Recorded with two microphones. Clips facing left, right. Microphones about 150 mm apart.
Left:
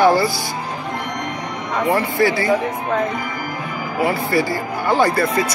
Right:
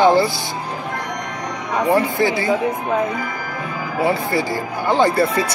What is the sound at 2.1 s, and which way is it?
Speech, 20° right (ahead or behind).